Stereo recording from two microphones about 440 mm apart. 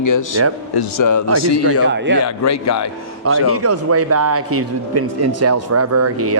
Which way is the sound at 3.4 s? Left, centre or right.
Right.